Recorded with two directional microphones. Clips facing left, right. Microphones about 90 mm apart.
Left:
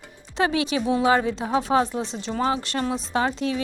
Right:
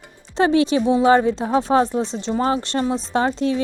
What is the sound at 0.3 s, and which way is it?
Speech, 35° right (ahead or behind).